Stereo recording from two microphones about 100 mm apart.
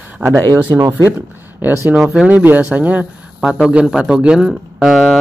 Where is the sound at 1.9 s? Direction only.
5° right (ahead or behind).